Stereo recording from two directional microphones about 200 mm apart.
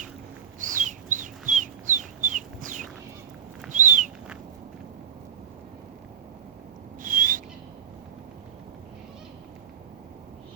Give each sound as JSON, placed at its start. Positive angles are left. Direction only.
{"t": 0.6, "sound": "bird", "side_deg": -40}
{"t": 3.7, "sound": "a sound", "side_deg": -40}
{"t": 7.0, "sound": "owl", "side_deg": -40}